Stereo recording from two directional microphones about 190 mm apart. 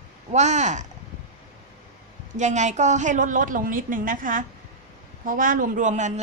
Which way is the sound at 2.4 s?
40° right (ahead or behind).